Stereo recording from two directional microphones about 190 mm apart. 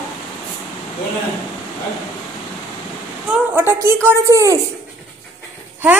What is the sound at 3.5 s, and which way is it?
A woman's voice, 10° right (ahead or behind).